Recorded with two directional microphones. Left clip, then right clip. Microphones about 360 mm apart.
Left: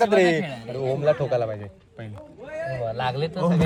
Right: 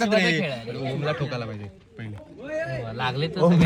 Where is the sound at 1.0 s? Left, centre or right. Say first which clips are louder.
Left 9 dB; left.